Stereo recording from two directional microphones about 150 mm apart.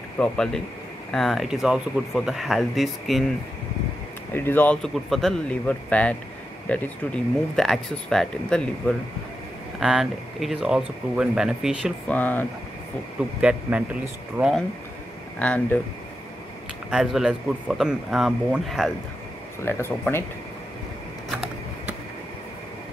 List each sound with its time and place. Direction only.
0.2 s speech: 5° left (ahead or behind)
4.3 s speech: 15° left (ahead or behind); by 11.9 s 5° right (ahead or behind)
12.1 s speech: 10° left (ahead or behind)
13.4 s a man's voice: 10° right (ahead or behind)
15.3 s speech: 10° left (ahead or behind)
16.9 s speech: centre (ahead or behind)
19.6 s speech: 15° left (ahead or behind)